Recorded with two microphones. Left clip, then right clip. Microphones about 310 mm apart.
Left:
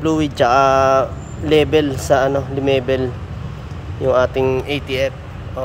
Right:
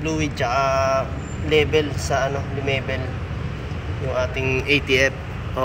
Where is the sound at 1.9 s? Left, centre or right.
Left.